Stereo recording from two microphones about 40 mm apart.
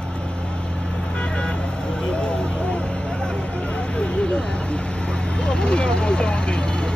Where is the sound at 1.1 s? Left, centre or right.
Left.